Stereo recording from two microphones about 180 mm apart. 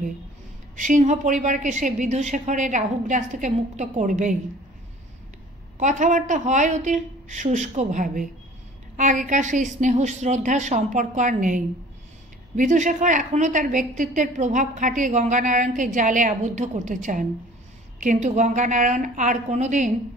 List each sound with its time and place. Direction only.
0.7 s a woman's voice: 45° right (ahead or behind)
5.8 s a woman's voice: 40° right (ahead or behind)